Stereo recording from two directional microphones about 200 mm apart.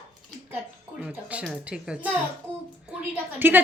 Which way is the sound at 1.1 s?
5° right (ahead or behind).